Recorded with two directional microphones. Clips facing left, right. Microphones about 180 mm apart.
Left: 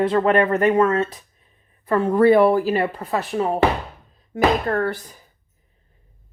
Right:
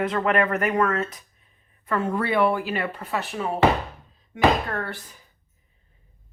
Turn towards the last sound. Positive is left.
turn(degrees=40)  # may be behind; listen again after turning